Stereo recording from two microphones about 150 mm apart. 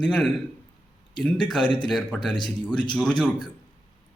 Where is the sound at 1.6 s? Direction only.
30° left (ahead or behind).